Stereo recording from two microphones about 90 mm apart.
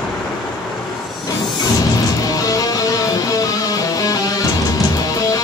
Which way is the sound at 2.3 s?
40° left (ahead or behind).